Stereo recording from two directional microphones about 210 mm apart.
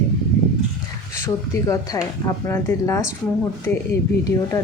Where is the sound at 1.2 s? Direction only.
15° left (ahead or behind).